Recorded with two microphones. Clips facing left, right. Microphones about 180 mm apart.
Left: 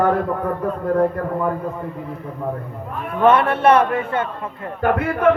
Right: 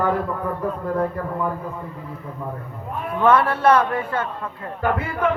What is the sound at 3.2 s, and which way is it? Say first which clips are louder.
A man's voice: left 2 dB; 25° left (ahead or behind).